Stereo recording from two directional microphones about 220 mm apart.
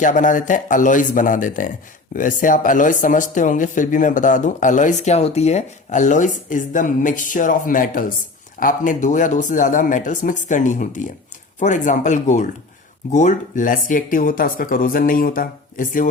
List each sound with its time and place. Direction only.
0.0 s speech: 35° left (ahead or behind)